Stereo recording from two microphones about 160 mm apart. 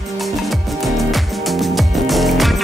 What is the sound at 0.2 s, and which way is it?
Music, centre (ahead or behind).